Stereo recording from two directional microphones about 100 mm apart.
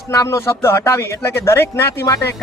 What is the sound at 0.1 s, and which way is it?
Speech, 35° left (ahead or behind).